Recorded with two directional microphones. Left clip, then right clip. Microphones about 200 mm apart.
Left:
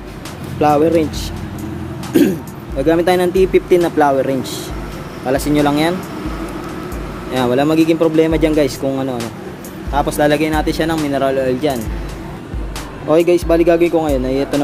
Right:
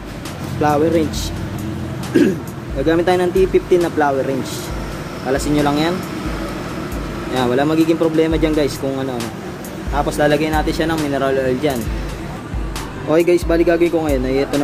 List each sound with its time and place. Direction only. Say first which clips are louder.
0.6 s speech: left 3 dB; 30° left (ahead or behind)
2.1 s speech: left 1 dB; 35° left (ahead or behind)
5.3 s speech: left 2 dB; 35° left (ahead or behind)
7.3 s speech: left 2 dB; 30° left (ahead or behind)
9.9 s speech: left 2 dB; 40° left (ahead or behind)
13.1 s speech: left 2 dB; 20° left (ahead or behind)